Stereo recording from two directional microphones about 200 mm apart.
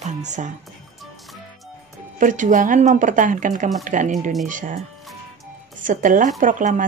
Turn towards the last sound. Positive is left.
turn(degrees=-40)  # may be behind; listen again after turning